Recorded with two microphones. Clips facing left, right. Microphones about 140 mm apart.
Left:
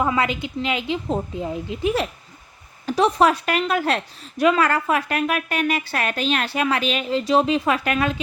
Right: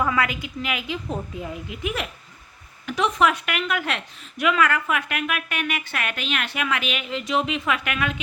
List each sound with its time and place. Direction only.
0.0 s a woman's voice: 25° left (ahead or behind)